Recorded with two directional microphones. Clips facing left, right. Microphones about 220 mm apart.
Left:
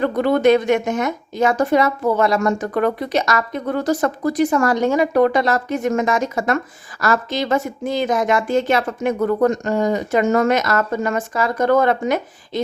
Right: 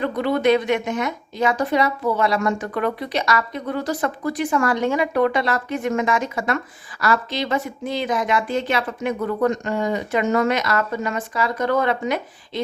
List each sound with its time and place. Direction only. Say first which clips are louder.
0.0 s a woman's voice: left 4 dB; 45° left (ahead or behind)